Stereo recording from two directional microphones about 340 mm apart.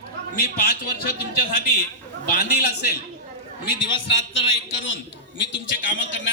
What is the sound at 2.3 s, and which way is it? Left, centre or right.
Speech, left.